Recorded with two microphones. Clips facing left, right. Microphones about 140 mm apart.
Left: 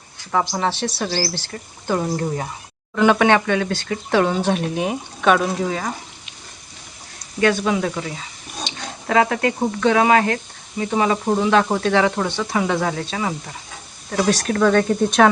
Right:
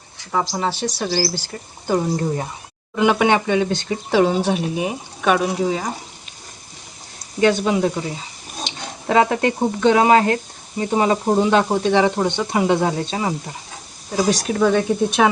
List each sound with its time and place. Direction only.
0.3 s speech: 5° right (ahead or behind)
2.9 s speech: 15° right (ahead or behind)
5.5 s speech: 20° right (ahead or behind)
7.4 s speech: 25° right (ahead or behind)
11.8 s speech: 20° right (ahead or behind)
14.1 s speech: 15° right (ahead or behind)